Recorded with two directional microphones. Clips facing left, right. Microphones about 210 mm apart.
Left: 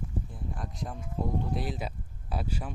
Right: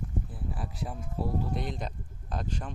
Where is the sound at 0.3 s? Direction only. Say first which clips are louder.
Right 1 dB; 5° right (ahead or behind).